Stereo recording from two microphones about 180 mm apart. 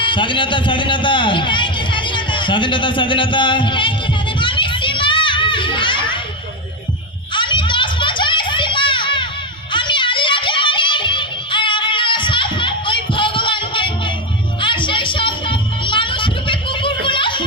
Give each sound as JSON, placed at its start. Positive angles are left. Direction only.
{"t": 0.0, "sound": "a man's voice", "side_deg": 25}
{"t": 4.4, "sound": "children playing", "side_deg": 25}
{"t": 7.3, "sound": "children playing", "side_deg": 25}
{"t": 14.6, "sound": "music", "side_deg": 25}